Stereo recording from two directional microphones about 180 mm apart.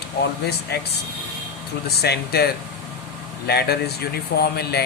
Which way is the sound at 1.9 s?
60° left (ahead or behind).